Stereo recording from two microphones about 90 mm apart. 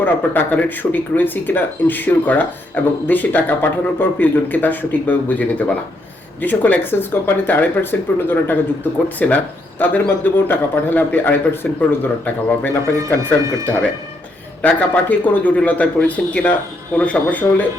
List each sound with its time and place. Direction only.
0.0 s speech: 20° left (ahead or behind)
13.1 s speech: 35° right (ahead or behind)
14.6 s speech: 20° left (ahead or behind)